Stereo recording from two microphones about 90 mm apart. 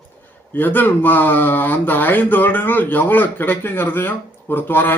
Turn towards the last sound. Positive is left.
turn(degrees=20)  # may be behind; listen again after turning